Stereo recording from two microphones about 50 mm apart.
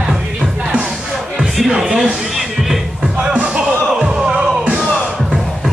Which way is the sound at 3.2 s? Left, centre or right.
Right.